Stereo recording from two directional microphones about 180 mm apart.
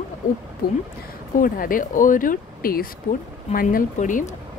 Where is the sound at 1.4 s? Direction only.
50° left (ahead or behind).